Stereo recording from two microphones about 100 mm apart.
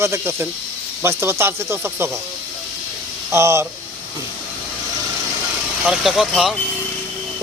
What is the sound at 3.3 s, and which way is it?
Speech, 30° right (ahead or behind).